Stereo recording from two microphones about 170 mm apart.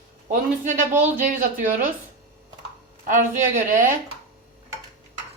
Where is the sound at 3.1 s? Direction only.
50° right (ahead or behind).